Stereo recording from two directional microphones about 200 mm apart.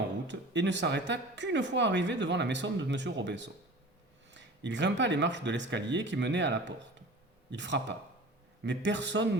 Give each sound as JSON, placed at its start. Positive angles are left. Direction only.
{"t": 0.3, "sound": "speech", "side_deg": -65}